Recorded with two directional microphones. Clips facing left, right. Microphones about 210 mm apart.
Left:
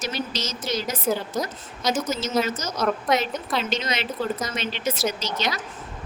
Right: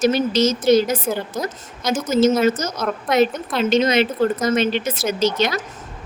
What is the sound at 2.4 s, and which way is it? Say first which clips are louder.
Speech: right 6 dB; 50° right (ahead or behind).